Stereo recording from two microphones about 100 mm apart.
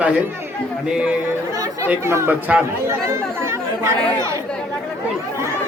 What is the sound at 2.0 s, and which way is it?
Speech, 25° right (ahead or behind).